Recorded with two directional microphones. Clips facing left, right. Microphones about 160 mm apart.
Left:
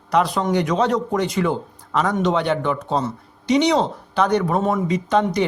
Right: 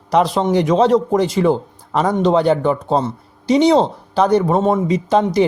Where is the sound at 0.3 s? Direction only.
30° right (ahead or behind).